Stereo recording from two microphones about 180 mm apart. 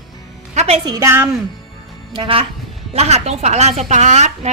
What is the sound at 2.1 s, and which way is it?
A woman's voice, 30° right (ahead or behind).